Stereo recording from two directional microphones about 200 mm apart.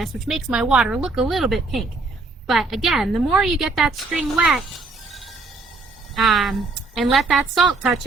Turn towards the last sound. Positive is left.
turn(degrees=0)  # may be behind; listen again after turning